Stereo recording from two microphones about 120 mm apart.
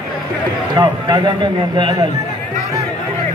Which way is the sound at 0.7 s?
35° right (ahead or behind).